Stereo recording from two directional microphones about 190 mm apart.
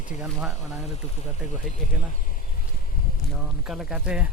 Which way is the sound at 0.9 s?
35° left (ahead or behind).